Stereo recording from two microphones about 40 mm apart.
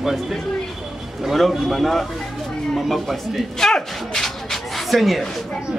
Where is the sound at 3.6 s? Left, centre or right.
Centre.